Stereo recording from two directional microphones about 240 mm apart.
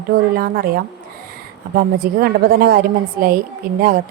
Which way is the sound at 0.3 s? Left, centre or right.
Right.